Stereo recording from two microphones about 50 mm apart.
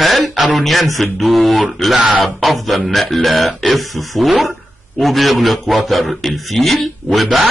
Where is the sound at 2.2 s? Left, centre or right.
Centre.